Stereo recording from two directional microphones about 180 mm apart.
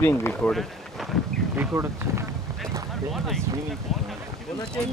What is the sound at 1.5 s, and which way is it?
Speech, 15° right (ahead or behind).